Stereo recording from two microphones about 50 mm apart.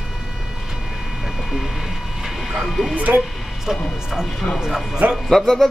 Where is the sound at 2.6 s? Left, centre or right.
Centre.